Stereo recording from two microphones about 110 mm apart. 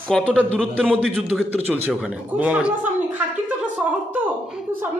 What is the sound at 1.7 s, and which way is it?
Speech, 10° right (ahead or behind).